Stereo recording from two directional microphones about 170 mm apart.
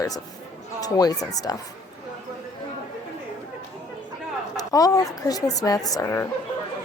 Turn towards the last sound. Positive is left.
turn(degrees=20)  # may be behind; listen again after turning